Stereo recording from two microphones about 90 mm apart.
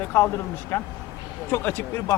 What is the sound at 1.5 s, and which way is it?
Speech, 25° left (ahead or behind).